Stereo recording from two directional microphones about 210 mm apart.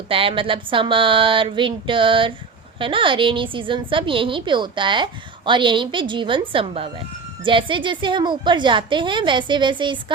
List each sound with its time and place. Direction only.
0.1 s a woman's voice: 25° right (ahead or behind)